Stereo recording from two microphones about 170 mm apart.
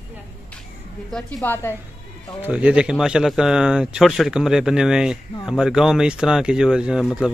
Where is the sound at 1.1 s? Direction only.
5° left (ahead or behind).